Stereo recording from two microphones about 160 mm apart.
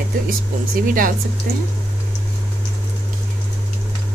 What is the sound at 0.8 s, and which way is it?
Speech, 60° right (ahead or behind).